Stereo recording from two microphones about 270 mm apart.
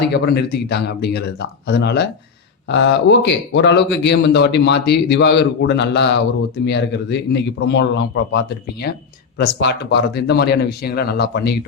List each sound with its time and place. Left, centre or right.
0.1 s a man's voice: left